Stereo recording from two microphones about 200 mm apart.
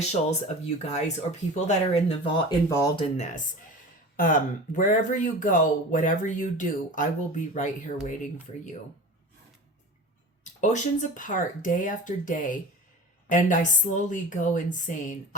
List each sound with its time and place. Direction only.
0.0 s speech: 35° left (ahead or behind); by 3.0 s 15° left (ahead or behind)
3.0 s speech: 35° left (ahead or behind)
10.4 s speech: 35° left (ahead or behind)